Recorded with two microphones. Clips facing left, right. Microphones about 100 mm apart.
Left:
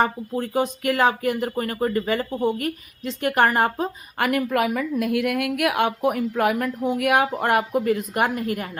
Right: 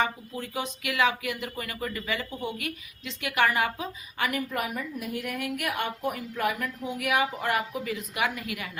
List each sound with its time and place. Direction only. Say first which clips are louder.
0.0 s speech: left 7 dB; 45° left (ahead or behind)